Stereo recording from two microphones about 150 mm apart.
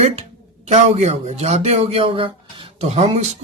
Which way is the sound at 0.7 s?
45° right (ahead or behind).